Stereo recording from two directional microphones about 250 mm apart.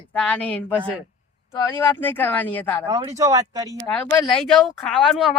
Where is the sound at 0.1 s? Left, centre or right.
Centre.